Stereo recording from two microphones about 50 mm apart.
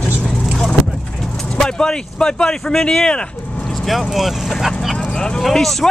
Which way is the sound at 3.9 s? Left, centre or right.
Centre.